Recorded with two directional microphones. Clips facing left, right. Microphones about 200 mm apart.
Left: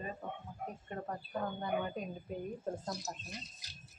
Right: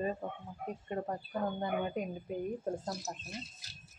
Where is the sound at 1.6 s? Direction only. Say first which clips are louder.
Right 2 dB; 20° right (ahead or behind).